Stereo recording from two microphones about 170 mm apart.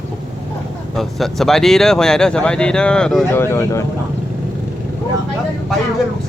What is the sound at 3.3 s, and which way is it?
Speech, 15° left (ahead or behind).